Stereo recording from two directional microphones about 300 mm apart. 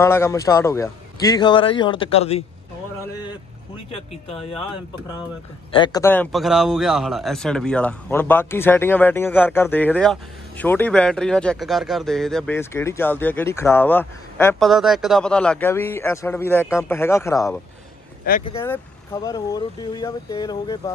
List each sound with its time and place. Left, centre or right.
0.0 s speech: centre
4.3 s speech: centre
5.7 s speech: centre